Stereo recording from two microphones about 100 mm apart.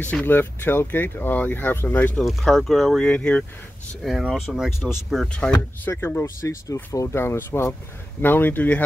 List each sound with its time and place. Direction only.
0.0 s speech: 15° left (ahead or behind)
2.2 s speech: centre (ahead or behind)
5.5 s speech: 25° left (ahead or behind)